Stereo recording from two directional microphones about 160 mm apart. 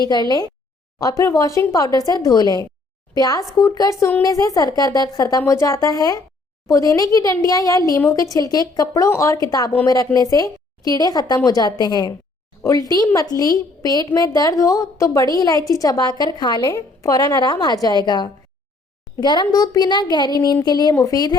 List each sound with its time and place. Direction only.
0.0 s a woman's voice: 25° left (ahead or behind)